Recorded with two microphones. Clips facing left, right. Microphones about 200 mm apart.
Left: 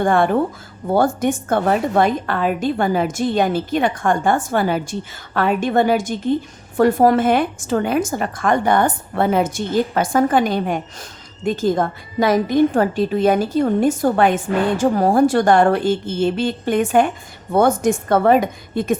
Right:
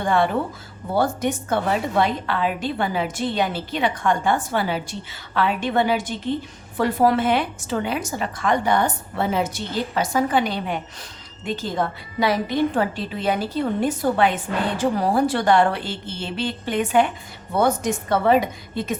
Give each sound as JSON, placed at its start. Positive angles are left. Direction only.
{"t": 0.0, "sound": "a woman's voice", "side_deg": 50}